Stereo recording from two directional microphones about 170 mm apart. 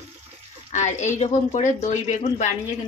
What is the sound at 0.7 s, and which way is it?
A woman's voice, 45° left (ahead or behind).